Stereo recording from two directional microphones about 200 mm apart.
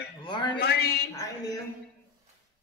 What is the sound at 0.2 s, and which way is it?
Speech, 25° left (ahead or behind).